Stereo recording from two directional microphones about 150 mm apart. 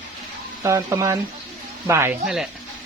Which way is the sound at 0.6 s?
20° right (ahead or behind).